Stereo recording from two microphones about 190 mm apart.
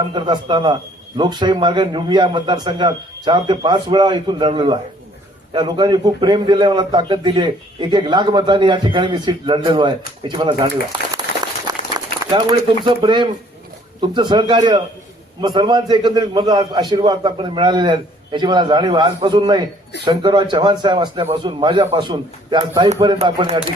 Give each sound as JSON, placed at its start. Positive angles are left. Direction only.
{"t": 0.1, "sound": "a man's voice", "side_deg": -25}
{"t": 11.9, "sound": "a man's voice", "side_deg": -20}